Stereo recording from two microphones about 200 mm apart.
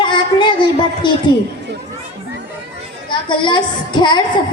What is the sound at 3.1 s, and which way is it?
A woman's voice, 25° left (ahead or behind).